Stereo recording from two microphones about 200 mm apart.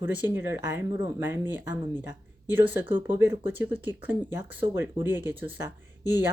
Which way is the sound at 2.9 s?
10° right (ahead or behind).